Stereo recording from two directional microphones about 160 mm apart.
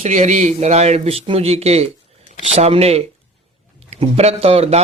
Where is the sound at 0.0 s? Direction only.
50° right (ahead or behind).